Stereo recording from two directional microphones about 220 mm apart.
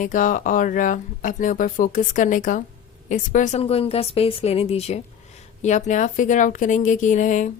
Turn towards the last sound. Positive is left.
turn(degrees=35)  # may be behind; listen again after turning